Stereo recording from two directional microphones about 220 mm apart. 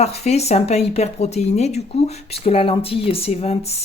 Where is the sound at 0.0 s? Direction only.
30° left (ahead or behind).